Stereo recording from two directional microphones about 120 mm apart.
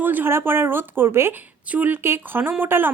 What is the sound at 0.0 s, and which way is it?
Speech, 15° right (ahead or behind).